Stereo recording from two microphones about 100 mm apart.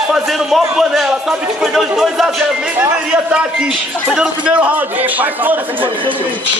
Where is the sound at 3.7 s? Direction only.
5° right (ahead or behind).